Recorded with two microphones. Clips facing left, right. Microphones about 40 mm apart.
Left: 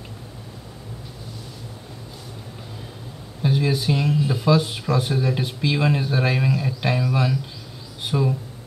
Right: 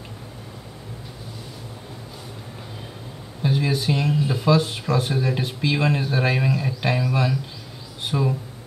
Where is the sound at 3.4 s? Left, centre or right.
Centre.